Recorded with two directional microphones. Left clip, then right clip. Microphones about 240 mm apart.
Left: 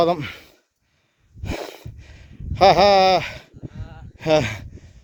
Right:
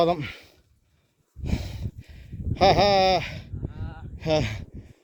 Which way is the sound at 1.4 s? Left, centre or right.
Left.